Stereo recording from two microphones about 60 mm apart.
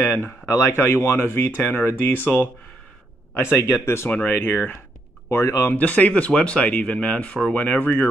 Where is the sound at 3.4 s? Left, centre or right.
Left.